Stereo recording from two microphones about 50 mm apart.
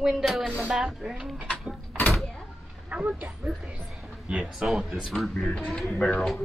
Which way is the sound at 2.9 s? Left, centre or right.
Right.